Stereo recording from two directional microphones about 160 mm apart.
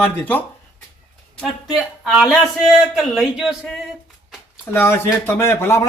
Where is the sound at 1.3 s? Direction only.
Centre (ahead or behind).